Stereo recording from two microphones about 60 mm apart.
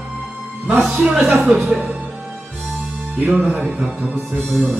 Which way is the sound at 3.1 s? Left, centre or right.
Right.